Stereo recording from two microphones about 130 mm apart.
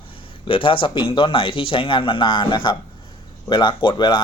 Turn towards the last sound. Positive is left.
turn(degrees=35)  # may be behind; listen again after turning